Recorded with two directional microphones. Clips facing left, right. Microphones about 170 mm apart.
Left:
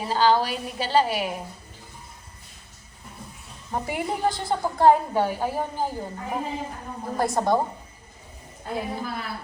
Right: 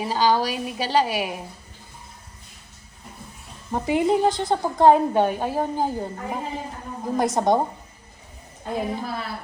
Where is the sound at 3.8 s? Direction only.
20° right (ahead or behind).